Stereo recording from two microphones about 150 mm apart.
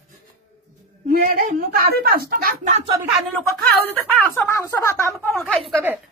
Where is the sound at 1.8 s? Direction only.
90° right.